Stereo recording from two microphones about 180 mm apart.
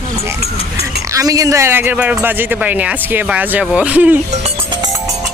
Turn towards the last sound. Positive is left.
turn(degrees=-25)  # may be behind; listen again after turning